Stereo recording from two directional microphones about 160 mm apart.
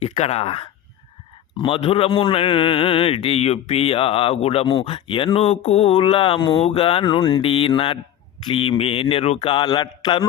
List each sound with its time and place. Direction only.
0.0 s speech: 40° left (ahead or behind)